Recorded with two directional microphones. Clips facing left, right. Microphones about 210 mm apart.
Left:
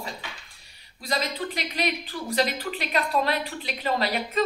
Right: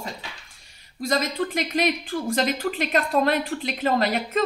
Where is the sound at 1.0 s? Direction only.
45° right (ahead or behind).